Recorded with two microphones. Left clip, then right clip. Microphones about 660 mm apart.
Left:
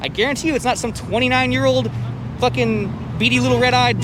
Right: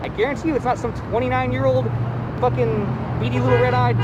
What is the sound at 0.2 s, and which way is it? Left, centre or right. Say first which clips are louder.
Speech: left 2 dB; left.